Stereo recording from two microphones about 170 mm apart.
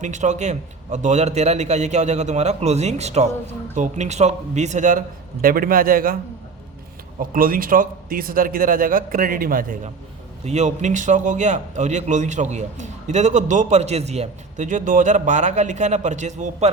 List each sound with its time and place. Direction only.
0.0 s a man's voice: 45° right (ahead or behind)
7.2 s a man's voice: 55° right (ahead or behind)
10.4 s a man's voice: 40° right (ahead or behind)